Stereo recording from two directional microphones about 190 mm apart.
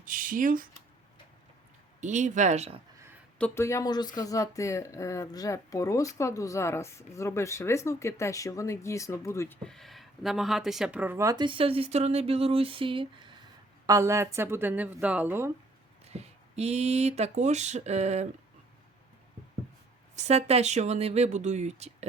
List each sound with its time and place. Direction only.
0.0 s speech: 45° right (ahead or behind)
2.0 s speech: 40° right (ahead or behind)
3.3 s speech: 10° left (ahead or behind)
9.6 s speech: centre (ahead or behind); by 13.3 s 25° right (ahead or behind)
13.8 s speech: 15° right (ahead or behind)
16.0 s speech: 35° right (ahead or behind)
20.1 s speech: 35° right (ahead or behind)